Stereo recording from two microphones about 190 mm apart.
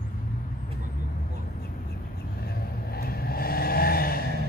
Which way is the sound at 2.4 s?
55° left (ahead or behind).